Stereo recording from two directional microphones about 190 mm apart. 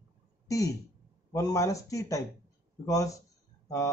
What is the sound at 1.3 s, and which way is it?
A man's voice, 15° left (ahead or behind).